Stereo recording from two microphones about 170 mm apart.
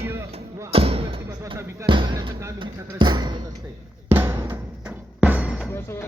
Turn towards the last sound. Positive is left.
turn(degrees=15)  # may be behind; listen again after turning